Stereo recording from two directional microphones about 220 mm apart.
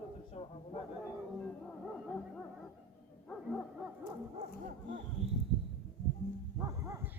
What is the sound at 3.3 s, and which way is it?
Bow-wow, centre (ahead or behind).